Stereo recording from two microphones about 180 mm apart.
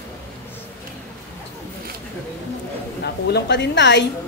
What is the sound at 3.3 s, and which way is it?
Speech, 70° left (ahead or behind).